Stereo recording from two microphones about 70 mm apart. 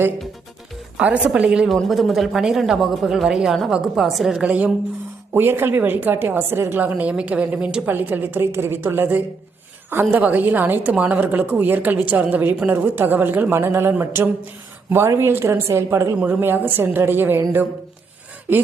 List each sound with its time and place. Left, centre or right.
0.9 s speech: centre
1.6 s a woman's voice: centre
4.0 s a woman's voice: centre
4.4 s a woman's voice: centre
5.3 s a woman's voice: right; by 7.9 s centre
7.9 s a woman's voice: right
16.2 s a woman's voice: right